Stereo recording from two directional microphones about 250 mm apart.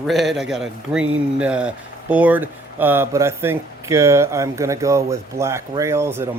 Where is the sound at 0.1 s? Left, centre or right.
Centre.